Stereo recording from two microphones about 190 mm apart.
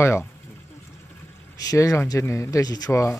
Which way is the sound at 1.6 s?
15° left (ahead or behind).